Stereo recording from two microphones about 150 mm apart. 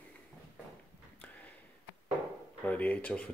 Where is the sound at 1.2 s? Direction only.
10° left (ahead or behind).